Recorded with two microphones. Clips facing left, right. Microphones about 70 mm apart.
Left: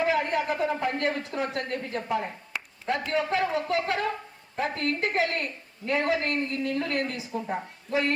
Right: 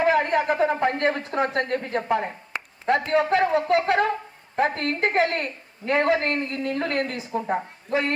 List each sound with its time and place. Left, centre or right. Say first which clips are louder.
0.0 s a woman's voice: right 5 dB; right